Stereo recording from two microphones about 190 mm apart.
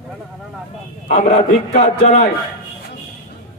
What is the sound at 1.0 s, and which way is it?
A man's voice, 40° left (ahead or behind).